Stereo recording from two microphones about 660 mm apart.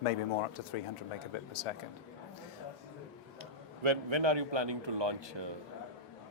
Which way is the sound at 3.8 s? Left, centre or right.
Right.